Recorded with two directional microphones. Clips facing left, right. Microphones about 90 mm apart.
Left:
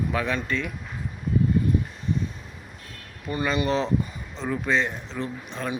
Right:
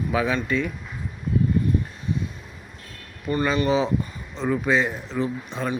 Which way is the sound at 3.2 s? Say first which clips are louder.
Right 4 dB; 10° left (ahead or behind).